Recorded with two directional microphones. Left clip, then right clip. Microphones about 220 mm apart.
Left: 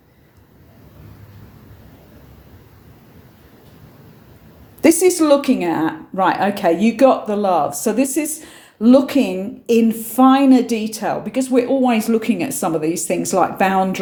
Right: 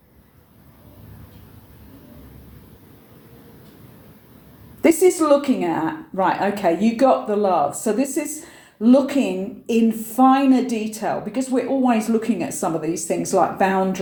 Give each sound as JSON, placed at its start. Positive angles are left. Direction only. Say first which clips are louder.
{"t": 4.8, "sound": "a woman's voice", "louder": "left 2 dB", "side_deg": 40}